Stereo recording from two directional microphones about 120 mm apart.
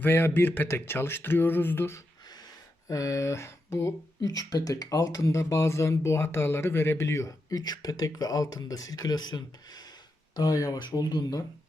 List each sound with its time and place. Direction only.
0.0 s speech: 15° left (ahead or behind)
2.3 s speech: 30° left (ahead or behind)